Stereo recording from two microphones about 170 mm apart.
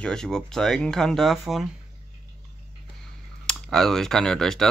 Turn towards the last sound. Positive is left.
turn(degrees=5)  # may be behind; listen again after turning